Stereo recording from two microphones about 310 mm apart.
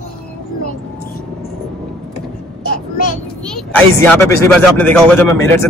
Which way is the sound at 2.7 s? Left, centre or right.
Left.